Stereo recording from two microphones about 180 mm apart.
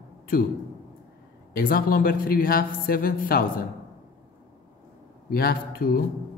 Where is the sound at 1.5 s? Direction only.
55° left (ahead or behind).